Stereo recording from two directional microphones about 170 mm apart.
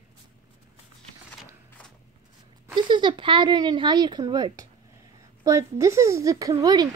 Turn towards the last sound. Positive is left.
turn(degrees=-20)  # may be behind; listen again after turning